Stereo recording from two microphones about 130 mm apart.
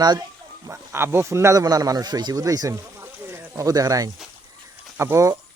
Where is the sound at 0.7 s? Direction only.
20° right (ahead or behind).